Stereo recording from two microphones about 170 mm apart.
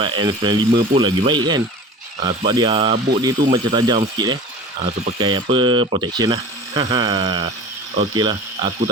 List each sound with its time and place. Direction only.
0.0 s speech: 30° right (ahead or behind)